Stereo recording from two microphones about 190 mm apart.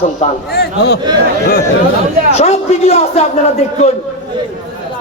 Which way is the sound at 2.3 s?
35° left (ahead or behind).